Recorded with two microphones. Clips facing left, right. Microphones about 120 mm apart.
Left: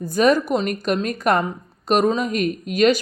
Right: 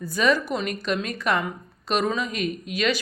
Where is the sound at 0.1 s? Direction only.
45° left (ahead or behind).